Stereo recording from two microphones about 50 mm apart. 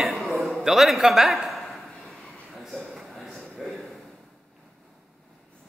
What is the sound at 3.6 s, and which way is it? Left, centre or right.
Speech, centre.